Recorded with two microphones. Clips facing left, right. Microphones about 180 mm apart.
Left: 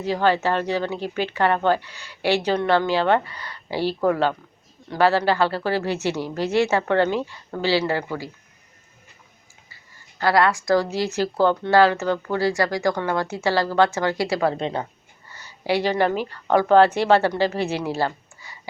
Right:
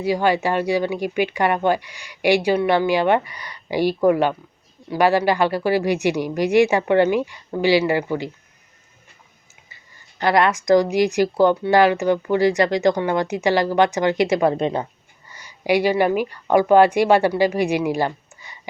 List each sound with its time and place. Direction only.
0.0 s speech: 10° right (ahead or behind)
10.2 s speech: 20° right (ahead or behind)